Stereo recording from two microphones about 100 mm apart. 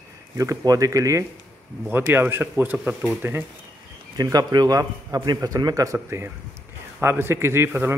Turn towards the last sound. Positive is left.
turn(degrees=-20)  # may be behind; listen again after turning